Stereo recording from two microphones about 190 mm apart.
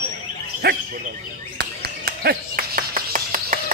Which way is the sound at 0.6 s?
55° right (ahead or behind).